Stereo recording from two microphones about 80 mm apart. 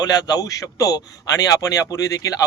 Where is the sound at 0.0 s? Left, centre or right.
Left.